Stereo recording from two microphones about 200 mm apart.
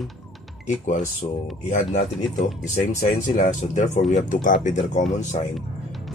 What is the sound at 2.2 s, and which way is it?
Speech, centre (ahead or behind).